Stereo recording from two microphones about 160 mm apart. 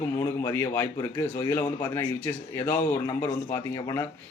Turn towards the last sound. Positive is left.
turn(degrees=15)  # may be behind; listen again after turning